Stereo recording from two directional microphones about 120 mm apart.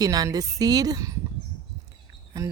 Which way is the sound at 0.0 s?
30° right (ahead or behind).